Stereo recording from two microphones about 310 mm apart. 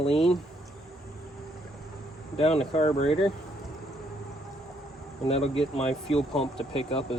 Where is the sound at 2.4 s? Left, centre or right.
Centre.